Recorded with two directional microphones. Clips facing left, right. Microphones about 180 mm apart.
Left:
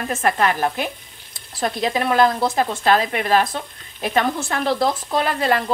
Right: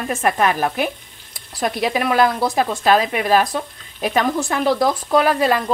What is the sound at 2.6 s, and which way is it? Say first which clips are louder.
Frying: right 3 dB; 15° right (ahead or behind).